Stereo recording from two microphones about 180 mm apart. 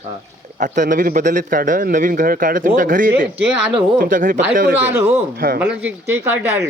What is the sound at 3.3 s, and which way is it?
Speech, 5° right (ahead or behind).